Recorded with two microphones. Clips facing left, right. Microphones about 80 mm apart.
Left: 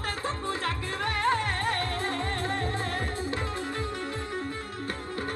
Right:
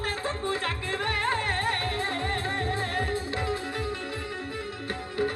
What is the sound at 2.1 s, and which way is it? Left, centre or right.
Music, right.